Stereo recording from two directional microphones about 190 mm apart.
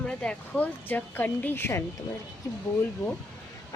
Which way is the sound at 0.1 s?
5° left (ahead or behind).